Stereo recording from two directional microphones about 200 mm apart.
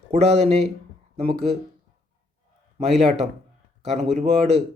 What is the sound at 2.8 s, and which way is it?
Speech, 35° right (ahead or behind).